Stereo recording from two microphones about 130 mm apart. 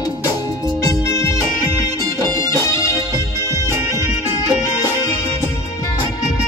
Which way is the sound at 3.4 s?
25° right (ahead or behind).